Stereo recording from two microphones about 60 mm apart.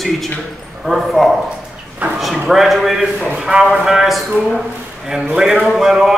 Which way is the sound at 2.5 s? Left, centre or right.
Centre.